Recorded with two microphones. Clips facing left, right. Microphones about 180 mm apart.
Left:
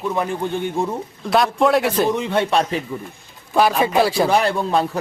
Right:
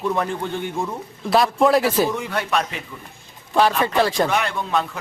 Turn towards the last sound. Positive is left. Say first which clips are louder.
# left 4 dB
turn(degrees=35)  # may be behind; listen again after turning